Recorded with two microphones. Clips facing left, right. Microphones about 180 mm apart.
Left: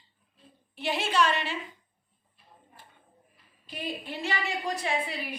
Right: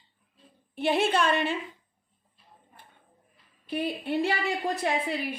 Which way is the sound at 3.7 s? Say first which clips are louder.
Right 7 dB; 60° right (ahead or behind).